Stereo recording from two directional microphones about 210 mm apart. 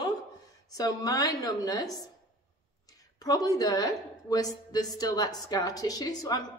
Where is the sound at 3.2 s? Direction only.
15° left (ahead or behind).